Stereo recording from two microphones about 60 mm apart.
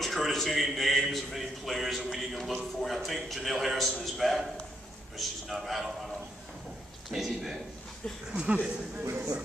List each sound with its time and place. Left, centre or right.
0.0 s a sound: centre
1.0 s a man's voice: centre
7.1 s a man's voice: centre
8.3 s speech: centre